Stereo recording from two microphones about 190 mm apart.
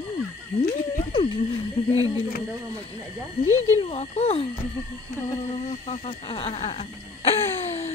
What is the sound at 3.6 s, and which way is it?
Speech, 35° left (ahead or behind).